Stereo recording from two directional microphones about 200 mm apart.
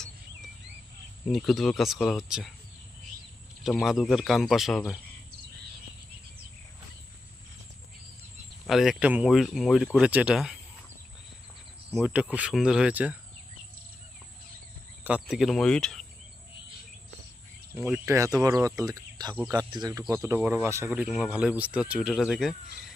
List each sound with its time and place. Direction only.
1.3 s speech: centre (ahead or behind)
3.6 s speech: centre (ahead or behind)
8.6 s speech: centre (ahead or behind)
11.9 s speech: 5° right (ahead or behind)
15.0 s speech: 5° right (ahead or behind)
17.7 s speech: 10° right (ahead or behind)